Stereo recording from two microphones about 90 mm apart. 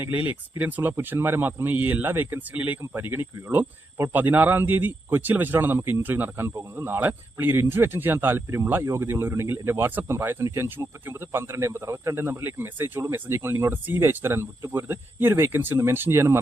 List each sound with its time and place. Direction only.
0.0 s speech: 20° right (ahead or behind)